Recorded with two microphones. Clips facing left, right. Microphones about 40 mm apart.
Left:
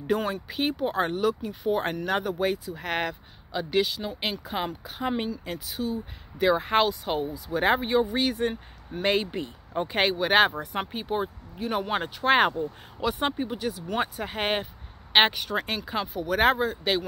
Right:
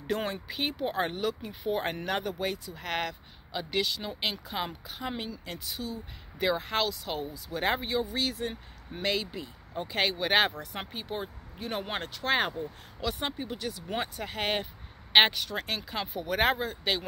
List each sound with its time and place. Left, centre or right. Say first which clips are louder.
0.2 s speech: left 4 dB; centre
5.0 s speech: left 7 dB; left
5.5 s speech: left 6 dB; centre
6.7 s speech: left 7 dB; left
7.9 s speech: left 6 dB; left
9.3 s speech: left 7 dB; left
10.1 s speech: left 5 dB; centre
10.5 s speech: left 7 dB; left; by 11.8 s centre
12.3 s speech: left 7 dB; left
12.5 s speech: left 6 dB; centre
16.1 s speech: left 4 dB; centre